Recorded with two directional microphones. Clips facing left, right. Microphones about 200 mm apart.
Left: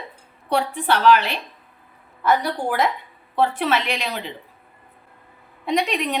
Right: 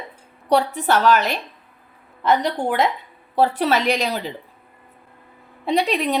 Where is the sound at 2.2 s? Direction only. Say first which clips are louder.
Right 1 dB; 25° right (ahead or behind).